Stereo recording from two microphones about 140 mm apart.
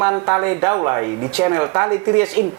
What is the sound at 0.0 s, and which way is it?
Speech, 20° right (ahead or behind).